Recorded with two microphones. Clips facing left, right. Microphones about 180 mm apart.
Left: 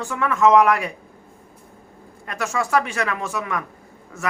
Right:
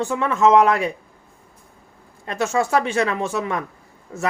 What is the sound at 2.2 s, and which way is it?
Speech, 25° right (ahead or behind).